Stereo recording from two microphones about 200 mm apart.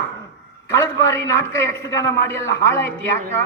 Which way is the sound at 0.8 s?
15° left (ahead or behind).